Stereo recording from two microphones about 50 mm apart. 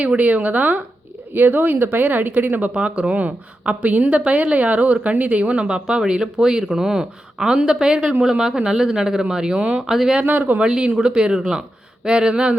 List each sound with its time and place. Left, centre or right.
0.0 s speech: right
2.7 s a woman's voice: right
10.2 s speech: right
10.6 s a woman's voice: centre